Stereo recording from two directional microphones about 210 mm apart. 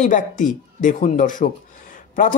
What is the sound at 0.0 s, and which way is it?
Speech, 40° left (ahead or behind).